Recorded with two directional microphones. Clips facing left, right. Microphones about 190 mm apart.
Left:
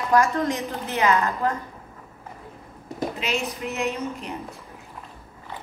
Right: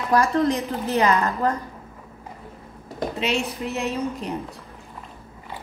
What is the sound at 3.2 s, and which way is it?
A woman's voice, 30° right (ahead or behind).